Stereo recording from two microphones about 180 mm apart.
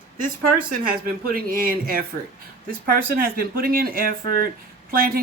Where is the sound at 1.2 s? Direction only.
55° right (ahead or behind).